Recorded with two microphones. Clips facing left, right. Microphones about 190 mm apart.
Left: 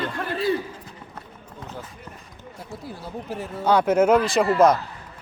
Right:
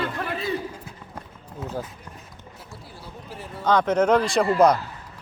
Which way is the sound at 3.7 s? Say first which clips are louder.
Left 2 dB; 10° left (ahead or behind).